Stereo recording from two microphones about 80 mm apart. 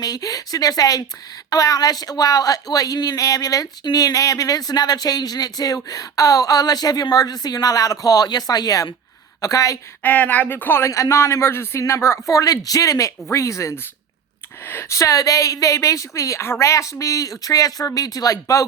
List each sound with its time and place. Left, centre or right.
0.0 s speech: left
10.0 s speech: left
10.8 s speech: left